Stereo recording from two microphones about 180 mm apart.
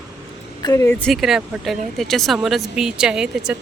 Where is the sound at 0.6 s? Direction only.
20° left (ahead or behind).